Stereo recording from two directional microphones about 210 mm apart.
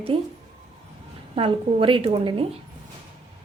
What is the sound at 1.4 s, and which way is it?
A woman's voice, 25° right (ahead or behind).